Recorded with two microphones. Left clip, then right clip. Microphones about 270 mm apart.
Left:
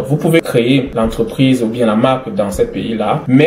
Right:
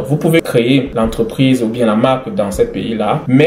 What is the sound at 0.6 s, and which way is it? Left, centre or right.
Speech, right.